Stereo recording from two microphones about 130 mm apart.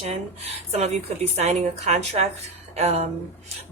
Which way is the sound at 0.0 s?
55° right (ahead or behind).